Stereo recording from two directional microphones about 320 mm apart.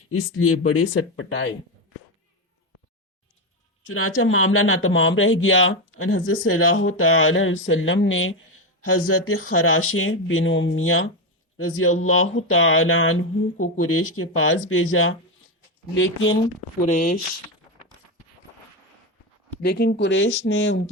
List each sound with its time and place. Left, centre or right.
0.1 s speech: left
3.8 s speech: left
16.9 s speech: left
19.6 s speech: left